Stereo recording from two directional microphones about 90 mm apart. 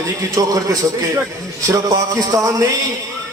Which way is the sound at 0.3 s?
40° right (ahead or behind).